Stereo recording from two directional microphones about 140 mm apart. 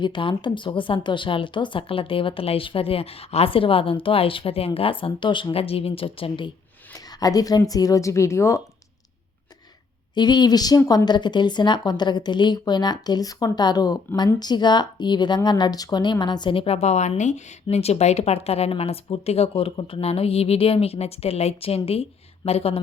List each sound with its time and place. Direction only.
0.0 s speech: 35° left (ahead or behind)
6.9 s speech: 25° left (ahead or behind)
10.2 s a woman's voice: 30° left (ahead or behind)